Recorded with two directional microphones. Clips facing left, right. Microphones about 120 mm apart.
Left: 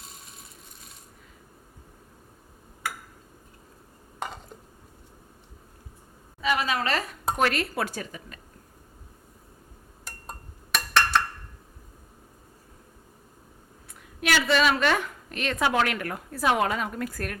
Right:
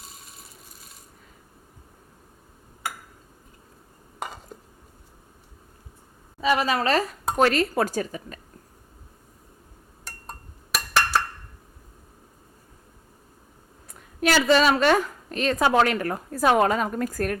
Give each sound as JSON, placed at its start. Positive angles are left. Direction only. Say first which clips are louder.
{"t": 0.0, "sound": "ratchet", "louder": "right 1 dB", "side_deg": 0}
{"t": 6.4, "sound": "a woman's voice", "louder": "right 4 dB", "side_deg": -35}
{"t": 10.0, "sound": "a sound", "louder": "right 1 dB", "side_deg": 0}
{"t": 14.2, "sound": "a woman's voice", "louder": "right 4 dB", "side_deg": -40}